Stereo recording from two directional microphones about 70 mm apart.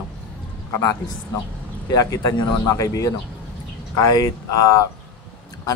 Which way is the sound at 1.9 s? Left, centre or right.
Left.